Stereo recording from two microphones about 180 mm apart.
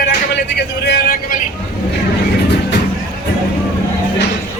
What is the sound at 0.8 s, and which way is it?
Speech, 55° left (ahead or behind).